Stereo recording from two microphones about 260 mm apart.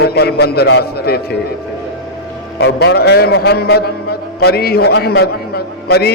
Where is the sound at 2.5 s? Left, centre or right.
Left.